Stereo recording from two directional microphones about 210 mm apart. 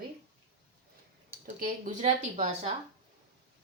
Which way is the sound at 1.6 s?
35° right (ahead or behind).